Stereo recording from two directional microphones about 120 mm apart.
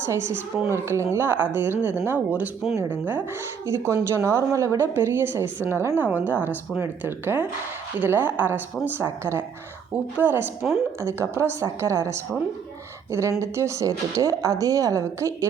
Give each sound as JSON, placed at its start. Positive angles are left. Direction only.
{"t": 0.0, "sound": "speech", "side_deg": -20}